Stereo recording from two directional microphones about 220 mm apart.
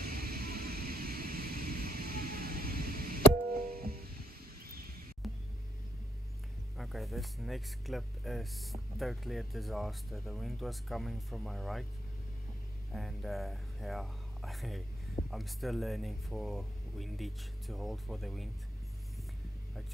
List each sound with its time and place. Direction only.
0.0 s vehicle: 40° right (ahead or behind)
5.2 s music: centre (ahead or behind)
6.8 s speech: centre (ahead or behind)
12.9 s speech: centre (ahead or behind)